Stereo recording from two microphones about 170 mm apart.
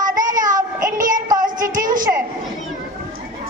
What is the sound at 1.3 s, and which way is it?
Music, 50° right (ahead or behind).